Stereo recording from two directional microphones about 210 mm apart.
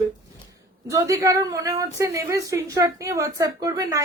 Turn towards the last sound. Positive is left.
turn(degrees=-15)  # may be behind; listen again after turning